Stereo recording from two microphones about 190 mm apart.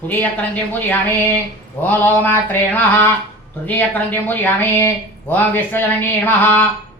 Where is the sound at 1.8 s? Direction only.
10° left (ahead or behind).